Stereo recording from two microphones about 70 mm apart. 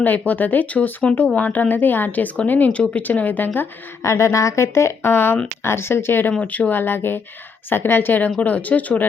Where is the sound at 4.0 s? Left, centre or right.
Left.